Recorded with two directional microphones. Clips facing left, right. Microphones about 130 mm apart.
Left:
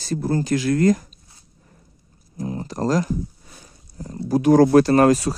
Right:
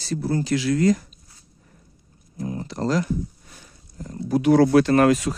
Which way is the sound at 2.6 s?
40° left (ahead or behind).